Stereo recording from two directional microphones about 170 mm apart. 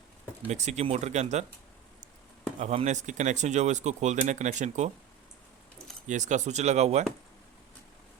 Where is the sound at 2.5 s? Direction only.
40° right (ahead or behind).